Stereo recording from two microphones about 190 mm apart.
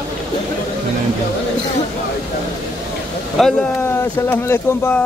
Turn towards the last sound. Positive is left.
turn(degrees=10)  # may be behind; listen again after turning